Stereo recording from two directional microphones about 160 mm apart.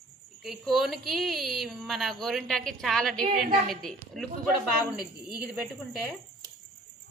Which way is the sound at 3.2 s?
50° right (ahead or behind).